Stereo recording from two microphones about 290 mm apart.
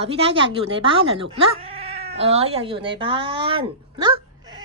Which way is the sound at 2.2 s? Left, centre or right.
Right.